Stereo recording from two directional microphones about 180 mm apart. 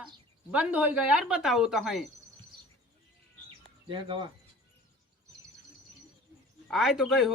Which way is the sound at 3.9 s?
25° right (ahead or behind).